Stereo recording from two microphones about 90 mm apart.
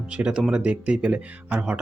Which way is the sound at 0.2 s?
10° right (ahead or behind).